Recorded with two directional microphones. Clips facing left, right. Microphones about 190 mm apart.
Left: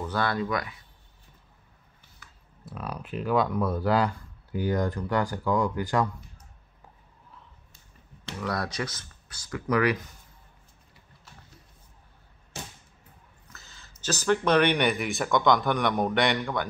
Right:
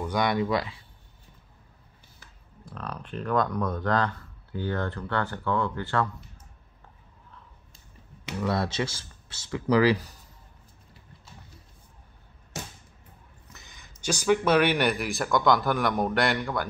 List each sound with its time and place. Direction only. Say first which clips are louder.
0.0 s speech: right 2 dB; 15° right (ahead or behind)
2.6 s speech: left 1 dB; 10° left (ahead or behind)
8.5 s speech: right 3 dB; 25° right (ahead or behind)
13.5 s speech: right 1 dB; 15° right (ahead or behind); by 16.6 s centre (ahead or behind)